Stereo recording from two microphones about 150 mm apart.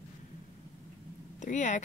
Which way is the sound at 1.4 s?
55° left (ahead or behind).